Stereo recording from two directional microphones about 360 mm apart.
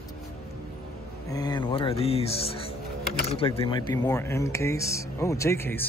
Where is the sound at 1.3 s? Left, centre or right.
Centre.